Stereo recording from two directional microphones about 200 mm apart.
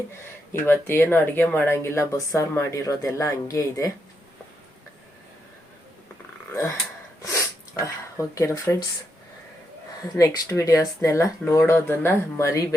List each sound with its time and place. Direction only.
0.6 s speech: 10° left (ahead or behind)
7.2 s sneeze: 15° left (ahead or behind)
8.4 s speech: 15° left (ahead or behind)
10.0 s speech: 20° left (ahead or behind)